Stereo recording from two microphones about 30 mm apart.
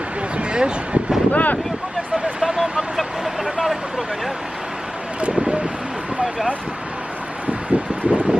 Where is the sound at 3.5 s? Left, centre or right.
Centre.